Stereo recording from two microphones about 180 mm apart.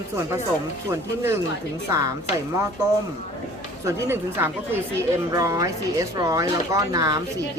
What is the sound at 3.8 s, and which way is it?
A woman's voice, 15° right (ahead or behind).